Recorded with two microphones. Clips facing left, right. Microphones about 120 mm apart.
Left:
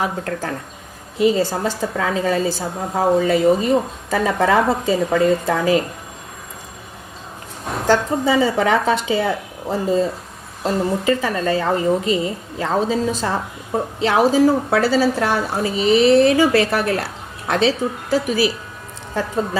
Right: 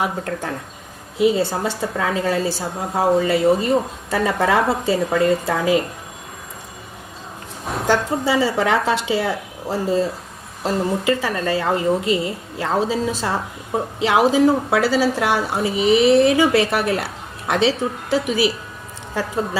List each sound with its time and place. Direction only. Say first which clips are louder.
0.0 s a woman's voice: even; 5° right (ahead or behind)
7.6 s a woman's voice: left 2 dB; centre (ahead or behind)
16.2 s a woman's voice: left 1 dB; 20° right (ahead or behind)
19.1 s a woman's voice: left 1 dB; 5° right (ahead or behind)